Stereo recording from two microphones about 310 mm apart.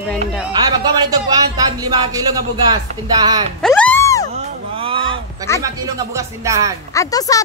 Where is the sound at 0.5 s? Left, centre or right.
Centre.